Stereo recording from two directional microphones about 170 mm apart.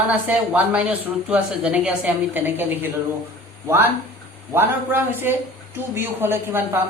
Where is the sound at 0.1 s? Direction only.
10° right (ahead or behind).